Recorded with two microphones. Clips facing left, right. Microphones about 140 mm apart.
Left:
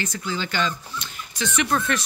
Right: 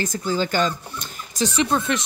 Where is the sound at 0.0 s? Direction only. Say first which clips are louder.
Right 5 dB; 40° right (ahead or behind).